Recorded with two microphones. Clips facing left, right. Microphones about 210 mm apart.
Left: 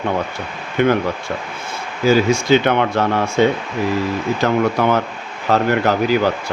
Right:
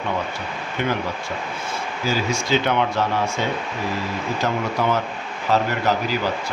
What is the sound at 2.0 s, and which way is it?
Speech, 60° left (ahead or behind).